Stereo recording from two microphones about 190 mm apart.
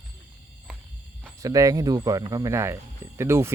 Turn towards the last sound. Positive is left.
turn(degrees=-15)  # may be behind; listen again after turning